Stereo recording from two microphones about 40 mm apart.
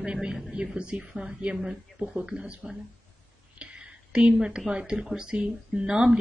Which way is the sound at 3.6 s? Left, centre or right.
Right.